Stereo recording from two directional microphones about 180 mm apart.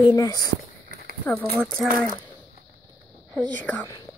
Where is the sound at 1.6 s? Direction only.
Centre (ahead or behind).